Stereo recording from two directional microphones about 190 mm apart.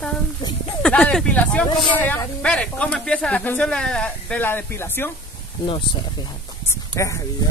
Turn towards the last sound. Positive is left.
turn(degrees=15)  # may be behind; listen again after turning